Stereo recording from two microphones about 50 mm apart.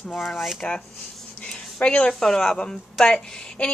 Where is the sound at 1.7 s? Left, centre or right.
Left.